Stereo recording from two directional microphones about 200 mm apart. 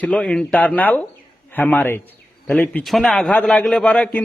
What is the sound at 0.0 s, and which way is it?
A man's voice, 5° left (ahead or behind).